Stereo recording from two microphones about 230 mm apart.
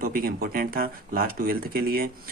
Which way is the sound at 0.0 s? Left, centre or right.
Right.